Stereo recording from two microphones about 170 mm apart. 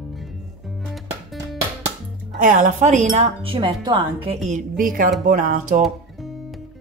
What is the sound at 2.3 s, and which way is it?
Speech, 50° right (ahead or behind).